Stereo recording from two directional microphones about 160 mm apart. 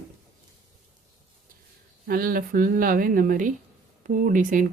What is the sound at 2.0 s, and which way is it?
Speech, 65° right (ahead or behind).